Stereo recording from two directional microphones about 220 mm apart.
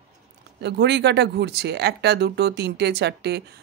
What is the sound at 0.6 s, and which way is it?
Speech, 50° right (ahead or behind).